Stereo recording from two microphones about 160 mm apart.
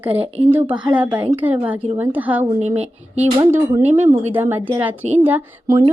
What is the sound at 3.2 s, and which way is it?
Speech, 15° right (ahead or behind).